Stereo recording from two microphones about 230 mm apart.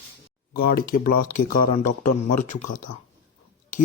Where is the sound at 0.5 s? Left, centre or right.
Left.